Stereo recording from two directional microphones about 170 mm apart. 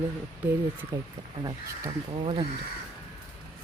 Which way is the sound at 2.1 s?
35° right (ahead or behind).